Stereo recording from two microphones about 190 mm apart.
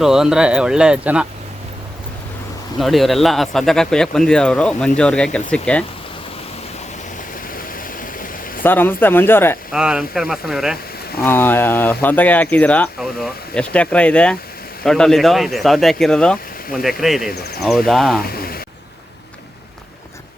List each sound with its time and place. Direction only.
0.0 s speech: 5° right (ahead or behind)
2.7 s speech: centre (ahead or behind)
7.5 s a sound: 45° left (ahead or behind)
8.6 s speech: 10° left (ahead or behind)
9.7 s speech: 5° right (ahead or behind)
11.2 s speech: 10° left (ahead or behind)
18.2 s a sound: 50° left (ahead or behind)